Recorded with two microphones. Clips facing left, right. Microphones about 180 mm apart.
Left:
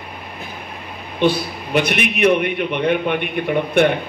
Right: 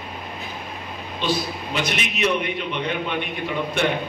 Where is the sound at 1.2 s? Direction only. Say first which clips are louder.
Left 7 dB; 60° left (ahead or behind).